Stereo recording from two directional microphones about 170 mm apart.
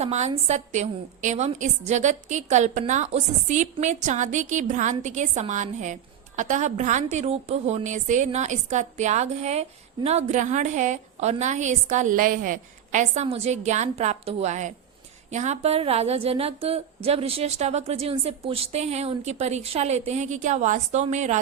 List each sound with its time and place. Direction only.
0.0 s a woman's voice: 40° right (ahead or behind)